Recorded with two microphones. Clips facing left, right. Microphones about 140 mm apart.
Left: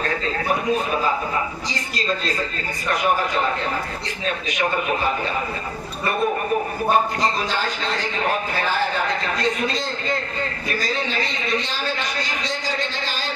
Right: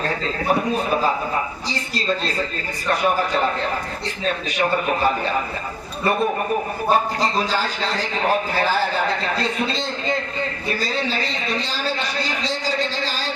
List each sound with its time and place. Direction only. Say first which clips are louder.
6.9 s speech: right 1 dB; 35° right (ahead or behind)
9.3 s a man's voice: even; 30° right (ahead or behind)